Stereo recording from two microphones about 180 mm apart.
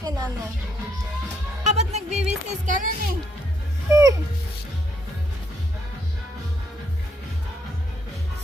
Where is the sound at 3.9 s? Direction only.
20° right (ahead or behind).